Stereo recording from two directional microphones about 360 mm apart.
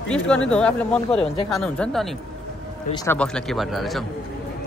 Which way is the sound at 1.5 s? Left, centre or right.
Centre.